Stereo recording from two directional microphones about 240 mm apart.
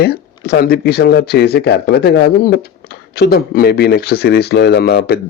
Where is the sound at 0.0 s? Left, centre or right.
Left.